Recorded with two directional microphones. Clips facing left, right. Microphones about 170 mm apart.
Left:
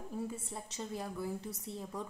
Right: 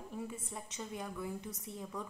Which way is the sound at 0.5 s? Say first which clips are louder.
Left 2 dB; 30° left (ahead or behind).